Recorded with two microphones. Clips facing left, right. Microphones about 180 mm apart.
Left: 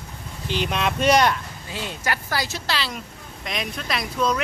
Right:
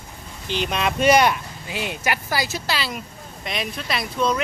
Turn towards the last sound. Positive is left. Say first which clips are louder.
# right 1 dB
turn(degrees=0)  # may be behind; listen again after turning